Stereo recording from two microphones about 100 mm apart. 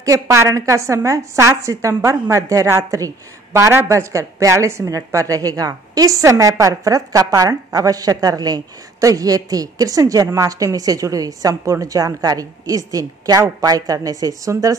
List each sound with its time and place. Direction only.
0.0 s a woman's voice: 30° right (ahead or behind)